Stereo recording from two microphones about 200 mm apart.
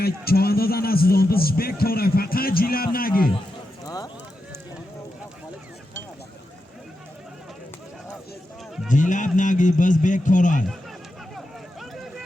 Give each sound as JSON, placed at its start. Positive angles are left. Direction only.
{"t": 0.0, "sound": "a man's voice", "side_deg": 50}
{"t": 3.8, "sound": "speech", "side_deg": 20}
{"t": 8.9, "sound": "a man's voice", "side_deg": 40}